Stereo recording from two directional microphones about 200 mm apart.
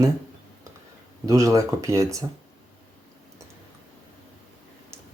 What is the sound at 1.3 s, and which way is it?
Speech, 15° right (ahead or behind).